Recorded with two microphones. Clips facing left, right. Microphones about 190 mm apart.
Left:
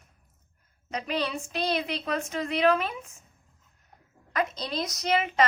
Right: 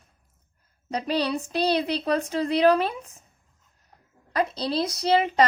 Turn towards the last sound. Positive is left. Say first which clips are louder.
# right 5 dB
turn(degrees=-35)  # may be behind; listen again after turning